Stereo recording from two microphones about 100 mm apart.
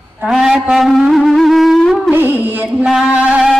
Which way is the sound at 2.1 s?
20° right (ahead or behind).